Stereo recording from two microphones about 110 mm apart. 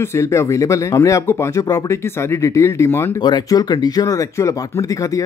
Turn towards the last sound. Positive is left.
turn(degrees=30)  # may be behind; listen again after turning